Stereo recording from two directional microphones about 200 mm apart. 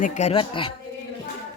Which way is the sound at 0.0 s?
35° left (ahead or behind).